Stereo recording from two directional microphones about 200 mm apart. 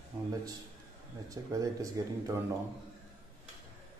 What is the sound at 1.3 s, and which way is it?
Speech, 15° right (ahead or behind).